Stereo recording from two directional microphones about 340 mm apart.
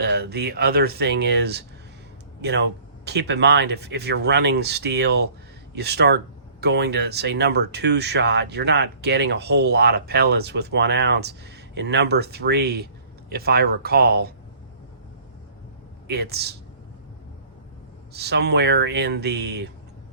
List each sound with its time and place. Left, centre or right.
0.0 s speech: right
16.0 s speech: right
18.1 s speech: right